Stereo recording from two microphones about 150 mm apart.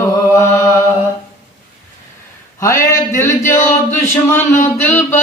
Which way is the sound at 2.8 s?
20° left (ahead or behind).